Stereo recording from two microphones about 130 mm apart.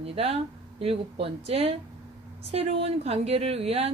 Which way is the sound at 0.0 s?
50° right (ahead or behind).